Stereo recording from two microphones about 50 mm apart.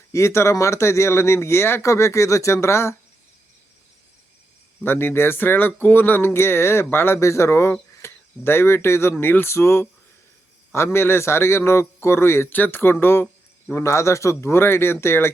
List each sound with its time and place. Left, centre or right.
0.1 s a man's voice: left
1.8 s speech: left
4.8 s speech: left
7.2 s speech: left
9.2 s speech: left
9.5 s a man's voice: left
12.5 s speech: left
12.8 s speech: left
13.7 s a man's voice: left